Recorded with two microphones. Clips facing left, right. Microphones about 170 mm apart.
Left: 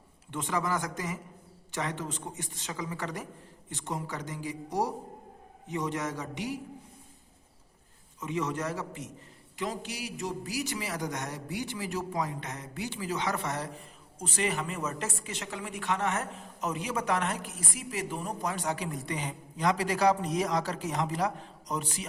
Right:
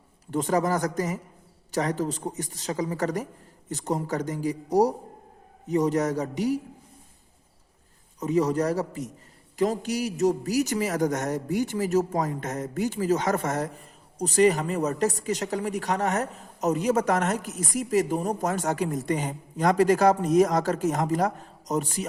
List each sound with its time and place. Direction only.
0.3 s a woman's voice: 40° right (ahead or behind)
8.2 s a woman's voice: 40° right (ahead or behind)